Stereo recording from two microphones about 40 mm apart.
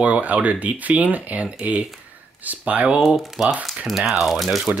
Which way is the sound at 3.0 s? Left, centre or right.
Centre.